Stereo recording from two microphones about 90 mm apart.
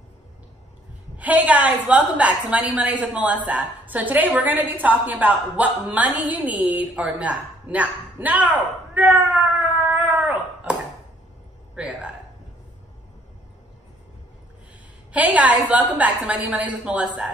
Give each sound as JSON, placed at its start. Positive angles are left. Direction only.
{"t": 1.1, "sound": "a woman's voice", "side_deg": -15}
{"t": 15.1, "sound": "a woman's voice", "side_deg": -15}